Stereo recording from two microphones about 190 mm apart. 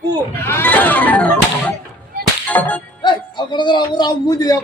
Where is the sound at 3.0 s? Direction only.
25° left (ahead or behind).